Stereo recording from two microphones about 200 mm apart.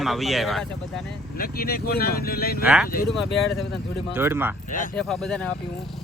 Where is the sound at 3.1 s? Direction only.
Centre (ahead or behind).